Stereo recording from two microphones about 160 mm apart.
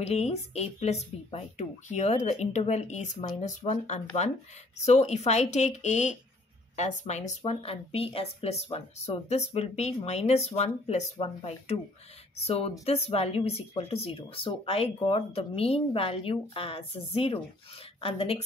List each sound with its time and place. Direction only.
0.0 s speech: 40° left (ahead or behind)